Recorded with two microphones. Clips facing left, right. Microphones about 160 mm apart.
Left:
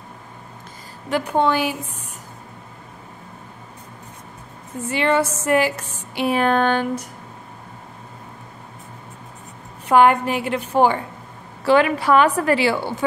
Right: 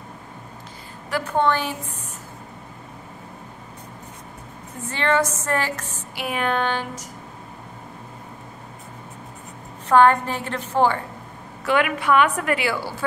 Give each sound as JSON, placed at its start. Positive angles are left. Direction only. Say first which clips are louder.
{"t": 1.1, "sound": "a woman's voice", "louder": "left 2 dB", "side_deg": 15}
{"t": 4.8, "sound": "a woman's voice", "louder": "left 2 dB", "side_deg": 10}
{"t": 6.1, "sound": "speech", "louder": "left 6 dB", "side_deg": 30}
{"t": 9.8, "sound": "a woman's voice", "louder": "left 1 dB", "side_deg": 10}
{"t": 11.6, "sound": "a woman's voice", "louder": "left 5 dB", "side_deg": 30}